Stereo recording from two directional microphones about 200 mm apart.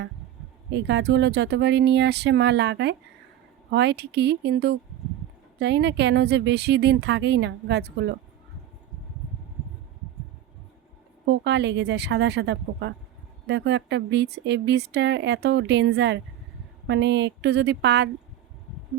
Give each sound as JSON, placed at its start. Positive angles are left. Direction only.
{"t": 0.7, "sound": "speech", "side_deg": -60}
{"t": 11.3, "sound": "speech", "side_deg": -60}